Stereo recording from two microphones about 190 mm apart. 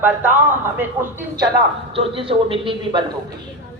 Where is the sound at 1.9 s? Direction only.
30° right (ahead or behind).